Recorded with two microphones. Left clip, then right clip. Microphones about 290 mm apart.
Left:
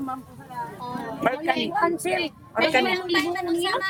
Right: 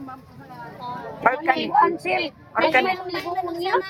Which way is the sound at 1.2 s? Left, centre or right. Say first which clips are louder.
Right 4 dB; centre.